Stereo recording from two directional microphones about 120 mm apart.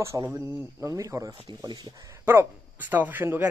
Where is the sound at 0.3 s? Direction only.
20° right (ahead or behind).